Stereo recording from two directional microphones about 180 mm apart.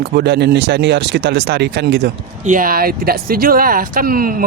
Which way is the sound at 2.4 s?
45° right (ahead or behind).